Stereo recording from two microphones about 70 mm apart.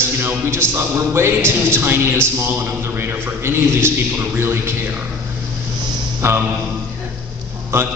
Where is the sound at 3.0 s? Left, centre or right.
Right.